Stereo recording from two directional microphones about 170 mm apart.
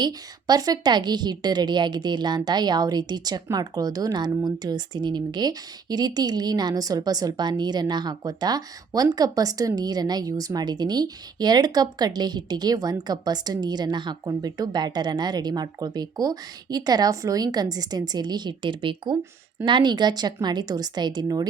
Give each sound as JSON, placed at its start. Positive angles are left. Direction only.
{"t": 0.0, "sound": "a woman's voice", "side_deg": -25}